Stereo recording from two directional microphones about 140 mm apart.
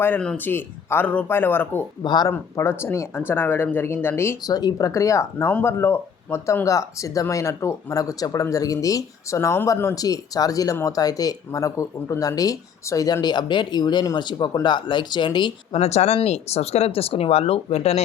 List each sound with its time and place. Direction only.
0.0 s speech: 10° left (ahead or behind)
2.0 s speech: 30° left (ahead or behind)
2.3 s speech: 20° left (ahead or behind); by 15.8 s 35° left (ahead or behind)
15.8 s speech: 50° left (ahead or behind)